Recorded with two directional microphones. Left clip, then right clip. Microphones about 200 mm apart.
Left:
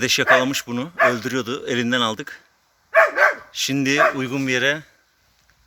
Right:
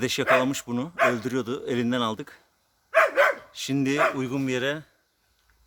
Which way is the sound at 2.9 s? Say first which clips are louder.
Left 4 dB; 30° right (ahead or behind).